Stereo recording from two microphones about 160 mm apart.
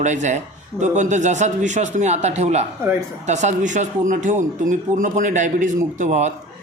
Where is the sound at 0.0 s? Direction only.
45° right (ahead or behind).